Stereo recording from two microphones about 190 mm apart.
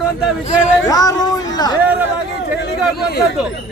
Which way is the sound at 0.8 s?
20° left (ahead or behind).